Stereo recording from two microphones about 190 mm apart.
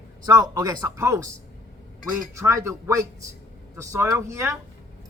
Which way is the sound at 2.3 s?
15° right (ahead or behind).